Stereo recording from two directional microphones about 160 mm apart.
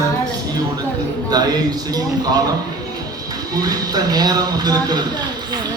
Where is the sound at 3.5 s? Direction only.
25° right (ahead or behind).